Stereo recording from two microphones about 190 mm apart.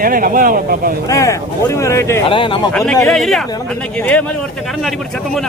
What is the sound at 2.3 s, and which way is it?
Speech, 25° left (ahead or behind).